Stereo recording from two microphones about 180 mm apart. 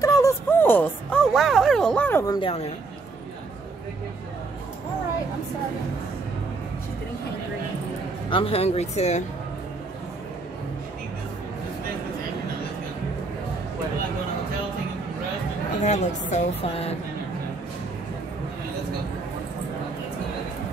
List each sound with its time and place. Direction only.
0.0 s music: 20° left (ahead or behind)
1.3 s a sound: centre (ahead or behind)
8.3 s a woman's voice: 30° left (ahead or behind)
15.8 s a woman's voice: 40° left (ahead or behind)